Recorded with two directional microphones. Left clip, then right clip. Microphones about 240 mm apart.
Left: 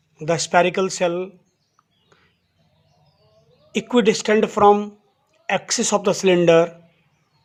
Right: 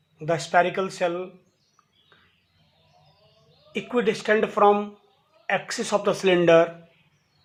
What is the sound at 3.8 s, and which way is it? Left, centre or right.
Speech, left.